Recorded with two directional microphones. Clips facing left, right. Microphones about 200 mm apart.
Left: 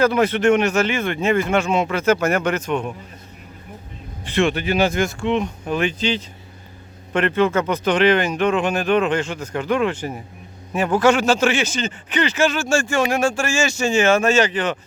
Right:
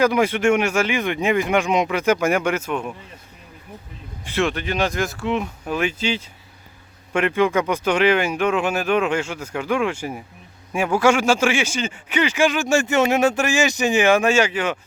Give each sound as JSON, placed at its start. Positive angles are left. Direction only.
{"t": 0.0, "sound": "a man's voice", "side_deg": -10}
{"t": 4.3, "sound": "a man's voice", "side_deg": 0}